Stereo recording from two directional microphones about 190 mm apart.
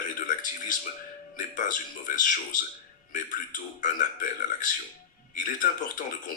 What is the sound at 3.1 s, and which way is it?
Speech, 45° left (ahead or behind).